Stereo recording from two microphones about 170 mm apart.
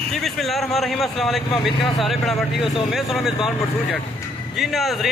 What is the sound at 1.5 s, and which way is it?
Speech, 30° left (ahead or behind).